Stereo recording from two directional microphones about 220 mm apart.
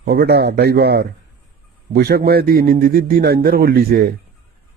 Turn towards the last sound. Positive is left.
turn(degrees=-40)  # may be behind; listen again after turning